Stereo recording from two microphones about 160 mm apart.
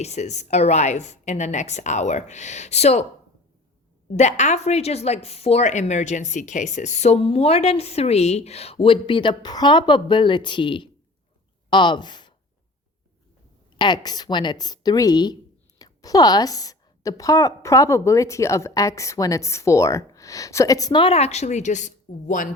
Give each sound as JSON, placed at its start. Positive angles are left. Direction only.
{"t": 0.0, "sound": "a woman's voice", "side_deg": 45}
{"t": 4.1, "sound": "speech", "side_deg": 45}
{"t": 13.7, "sound": "a woman's voice", "side_deg": 30}